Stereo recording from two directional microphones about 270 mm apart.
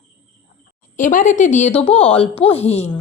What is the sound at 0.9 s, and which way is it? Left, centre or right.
A woman's voice, left.